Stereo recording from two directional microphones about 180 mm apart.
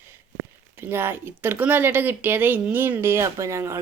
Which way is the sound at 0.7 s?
10° right (ahead or behind).